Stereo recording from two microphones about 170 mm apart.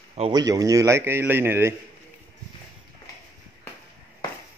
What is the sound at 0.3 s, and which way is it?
A man's voice, 20° right (ahead or behind).